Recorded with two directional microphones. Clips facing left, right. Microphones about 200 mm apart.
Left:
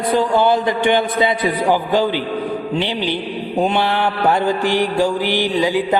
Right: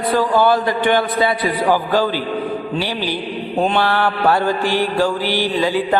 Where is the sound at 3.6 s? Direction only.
15° left (ahead or behind).